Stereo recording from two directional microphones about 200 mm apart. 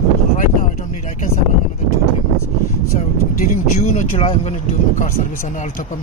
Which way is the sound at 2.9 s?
35° left (ahead or behind).